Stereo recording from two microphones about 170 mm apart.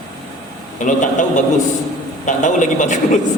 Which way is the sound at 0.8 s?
50° left (ahead or behind).